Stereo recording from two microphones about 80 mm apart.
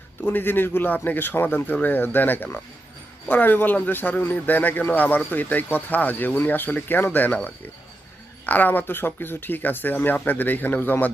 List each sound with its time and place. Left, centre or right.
0.2 s a man's voice: left